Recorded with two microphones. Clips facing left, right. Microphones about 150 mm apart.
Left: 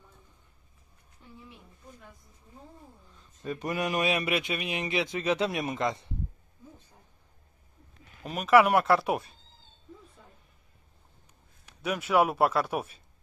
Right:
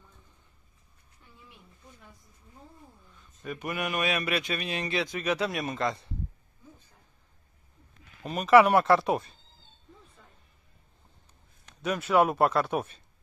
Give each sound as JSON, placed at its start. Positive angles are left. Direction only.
{"t": 3.2, "sound": "speech", "side_deg": 30}
{"t": 8.2, "sound": "speech", "side_deg": 5}
{"t": 11.6, "sound": "speech", "side_deg": 10}